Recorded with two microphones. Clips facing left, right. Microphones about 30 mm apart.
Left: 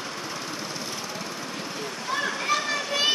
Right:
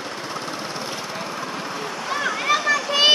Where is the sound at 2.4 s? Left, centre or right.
Right.